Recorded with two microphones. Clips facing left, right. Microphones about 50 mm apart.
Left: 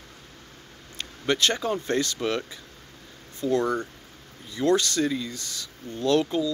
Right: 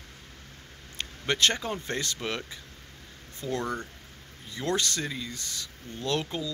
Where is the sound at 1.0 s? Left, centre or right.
Right.